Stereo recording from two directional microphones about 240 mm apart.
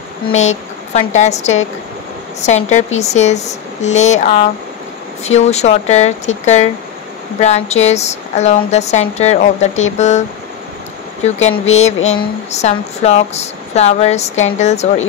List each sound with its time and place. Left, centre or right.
0.4 s speech: left
11.2 s speech: left